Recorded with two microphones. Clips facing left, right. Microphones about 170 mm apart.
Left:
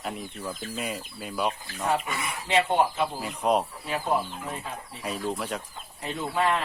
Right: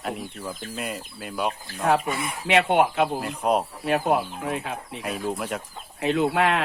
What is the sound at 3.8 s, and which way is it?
Speech, 65° right (ahead or behind).